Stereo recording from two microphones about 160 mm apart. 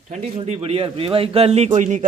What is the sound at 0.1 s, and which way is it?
Speech, 40° right (ahead or behind).